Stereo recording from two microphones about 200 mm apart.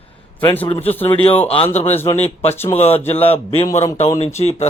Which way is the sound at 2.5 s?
10° left (ahead or behind).